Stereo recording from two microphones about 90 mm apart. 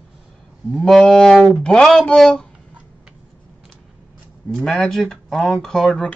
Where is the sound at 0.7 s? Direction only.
Centre (ahead or behind).